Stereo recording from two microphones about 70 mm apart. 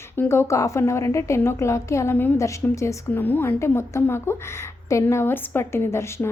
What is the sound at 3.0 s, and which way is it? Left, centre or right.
Speech, left.